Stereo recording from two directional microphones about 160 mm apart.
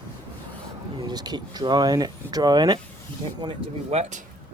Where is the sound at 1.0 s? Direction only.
25° right (ahead or behind); by 4.2 s 45° right (ahead or behind).